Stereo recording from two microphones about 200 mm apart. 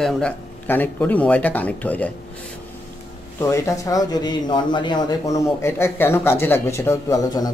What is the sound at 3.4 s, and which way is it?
Speech, 15° left (ahead or behind).